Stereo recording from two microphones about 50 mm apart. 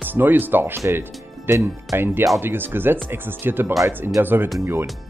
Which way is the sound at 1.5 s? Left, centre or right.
Right.